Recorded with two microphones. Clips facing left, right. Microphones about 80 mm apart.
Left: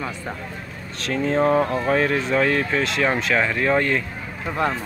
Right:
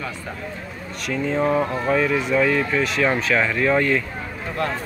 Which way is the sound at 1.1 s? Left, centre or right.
Left.